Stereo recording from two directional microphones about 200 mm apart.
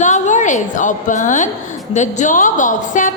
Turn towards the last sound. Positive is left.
turn(degrees=40)  # may be behind; listen again after turning